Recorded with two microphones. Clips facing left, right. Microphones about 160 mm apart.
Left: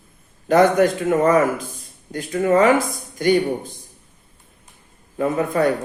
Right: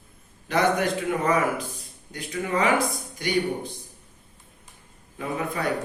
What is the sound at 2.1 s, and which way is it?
Speech, 45° left (ahead or behind).